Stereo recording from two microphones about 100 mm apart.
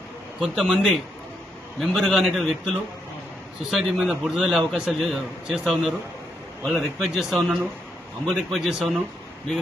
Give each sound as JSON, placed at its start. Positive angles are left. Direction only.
{"t": 0.3, "sound": "a man's voice", "side_deg": 0}